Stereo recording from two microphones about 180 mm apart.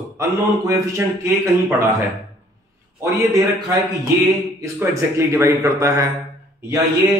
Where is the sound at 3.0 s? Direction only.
15° right (ahead or behind).